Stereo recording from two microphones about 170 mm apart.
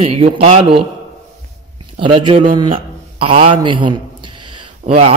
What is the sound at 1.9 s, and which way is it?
A man's voice, 30° right (ahead or behind).